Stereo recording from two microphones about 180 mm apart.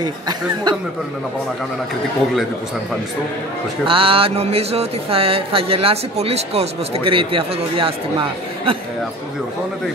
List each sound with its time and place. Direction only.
0.0 s speech: 25° right (ahead or behind)
3.8 s speech: 30° right (ahead or behind)